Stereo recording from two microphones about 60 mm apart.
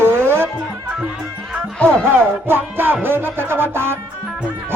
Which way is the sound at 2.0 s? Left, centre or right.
Right.